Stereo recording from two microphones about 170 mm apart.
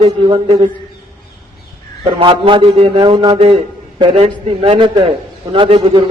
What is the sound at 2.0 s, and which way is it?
A man's voice, 30° right (ahead or behind).